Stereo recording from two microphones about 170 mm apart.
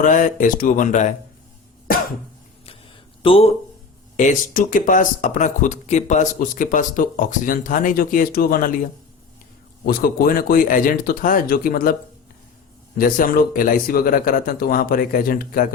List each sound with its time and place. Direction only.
0.0 s speech: 50° left (ahead or behind)
3.2 s speech: 35° left (ahead or behind)
4.2 s speech: 50° left (ahead or behind)
9.8 s speech: 60° left (ahead or behind)
13.0 s speech: 55° left (ahead or behind)